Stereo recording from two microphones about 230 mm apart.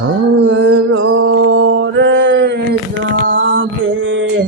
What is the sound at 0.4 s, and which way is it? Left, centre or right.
Mantra, right.